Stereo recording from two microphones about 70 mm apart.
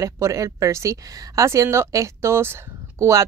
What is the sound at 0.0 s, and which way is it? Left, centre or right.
Speech, right.